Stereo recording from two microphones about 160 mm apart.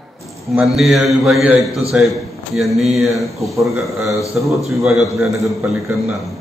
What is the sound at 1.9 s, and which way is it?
A man's voice, centre (ahead or behind).